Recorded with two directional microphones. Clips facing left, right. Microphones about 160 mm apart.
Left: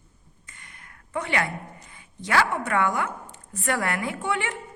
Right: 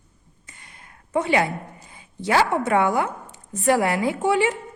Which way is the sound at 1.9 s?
20° right (ahead or behind).